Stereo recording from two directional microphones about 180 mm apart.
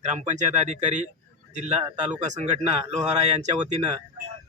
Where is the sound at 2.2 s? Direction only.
40° right (ahead or behind).